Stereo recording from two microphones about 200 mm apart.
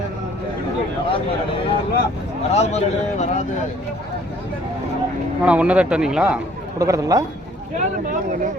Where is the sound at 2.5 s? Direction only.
35° left (ahead or behind).